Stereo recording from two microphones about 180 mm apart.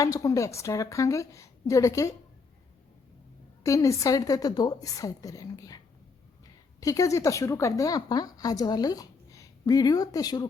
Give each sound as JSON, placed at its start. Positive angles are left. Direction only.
{"t": 0.0, "sound": "a woman's voice", "side_deg": 20}
{"t": 3.6, "sound": "a woman's voice", "side_deg": 15}